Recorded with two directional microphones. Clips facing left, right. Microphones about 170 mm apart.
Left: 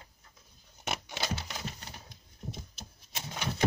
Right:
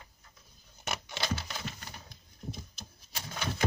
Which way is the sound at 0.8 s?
15° left (ahead or behind).